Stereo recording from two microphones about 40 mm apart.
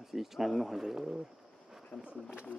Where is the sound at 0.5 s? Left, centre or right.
Centre.